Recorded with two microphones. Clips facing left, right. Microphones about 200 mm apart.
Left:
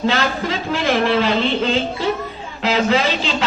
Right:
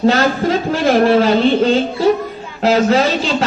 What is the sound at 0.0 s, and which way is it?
Speech, 45° right (ahead or behind).